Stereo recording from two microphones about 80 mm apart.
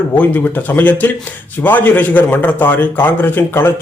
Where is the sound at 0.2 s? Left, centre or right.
Left.